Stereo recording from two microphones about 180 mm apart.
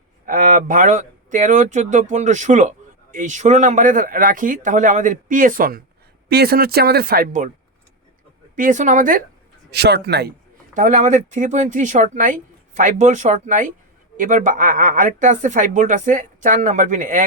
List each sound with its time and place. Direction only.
0.3 s speech: 50° right (ahead or behind)
8.5 s speech: 45° right (ahead or behind)
9.7 s a man's voice: 65° right (ahead or behind)
10.8 s speech: 45° right (ahead or behind)